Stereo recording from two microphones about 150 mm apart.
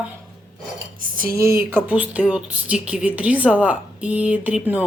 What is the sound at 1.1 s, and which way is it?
Speech, 70° right (ahead or behind).